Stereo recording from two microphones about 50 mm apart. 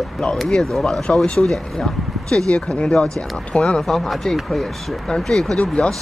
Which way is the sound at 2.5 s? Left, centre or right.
Centre.